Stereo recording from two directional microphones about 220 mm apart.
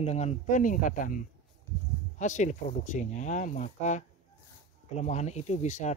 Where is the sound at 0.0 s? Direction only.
30° left (ahead or behind).